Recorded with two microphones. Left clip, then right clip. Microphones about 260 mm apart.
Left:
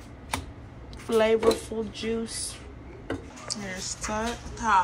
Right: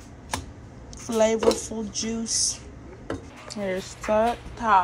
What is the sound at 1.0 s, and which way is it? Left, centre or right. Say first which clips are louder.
Speech: right 1 dB; centre.